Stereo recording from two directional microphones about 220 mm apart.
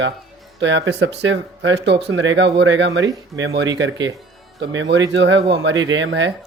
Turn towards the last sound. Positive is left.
turn(degrees=-55)  # may be behind; listen again after turning